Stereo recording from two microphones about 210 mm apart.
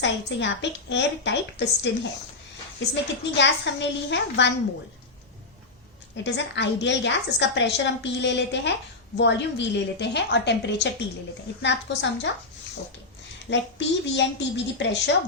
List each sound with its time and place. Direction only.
0.0 s a woman's voice: 60° left (ahead or behind)
2.9 s a woman's voice: 60° left (ahead or behind)
6.2 s a woman's voice: 55° left (ahead or behind)
13.5 s a woman's voice: 55° left (ahead or behind)